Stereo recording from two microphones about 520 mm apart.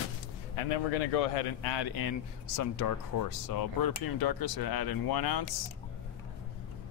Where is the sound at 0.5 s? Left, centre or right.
Left.